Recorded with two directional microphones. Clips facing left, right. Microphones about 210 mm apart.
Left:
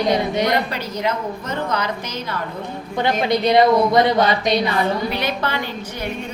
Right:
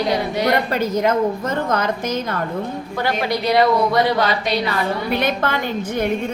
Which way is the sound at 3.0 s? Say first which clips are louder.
Left 3 dB; 20° left (ahead or behind).